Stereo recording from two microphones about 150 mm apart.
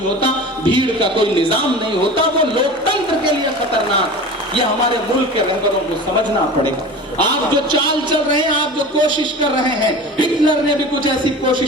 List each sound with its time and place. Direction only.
0.2 s speech: 30° right (ahead or behind)
7.5 s speech: 30° right (ahead or behind)